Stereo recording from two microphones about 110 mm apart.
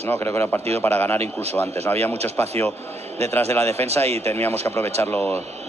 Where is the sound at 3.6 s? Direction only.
70° right (ahead or behind).